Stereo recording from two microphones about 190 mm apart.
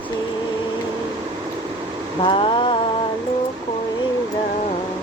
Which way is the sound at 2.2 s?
25° left (ahead or behind).